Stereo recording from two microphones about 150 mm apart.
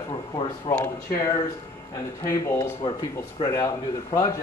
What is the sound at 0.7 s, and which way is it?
Speech, 15° left (ahead or behind).